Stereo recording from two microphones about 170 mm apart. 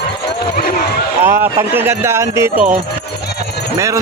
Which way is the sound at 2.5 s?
50° right (ahead or behind).